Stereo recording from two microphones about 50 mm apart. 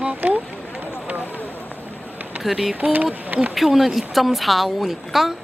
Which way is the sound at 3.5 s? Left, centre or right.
Centre.